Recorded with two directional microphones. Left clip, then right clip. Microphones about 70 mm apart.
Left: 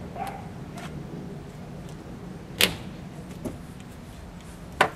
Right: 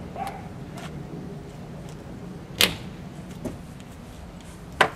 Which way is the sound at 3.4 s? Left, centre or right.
Centre.